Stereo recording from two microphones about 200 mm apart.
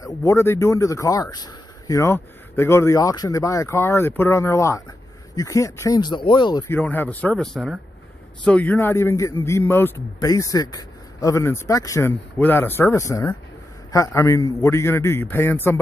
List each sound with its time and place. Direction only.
0.0 s a man's voice: 15° left (ahead or behind)
6.7 s a man's voice: 10° left (ahead or behind)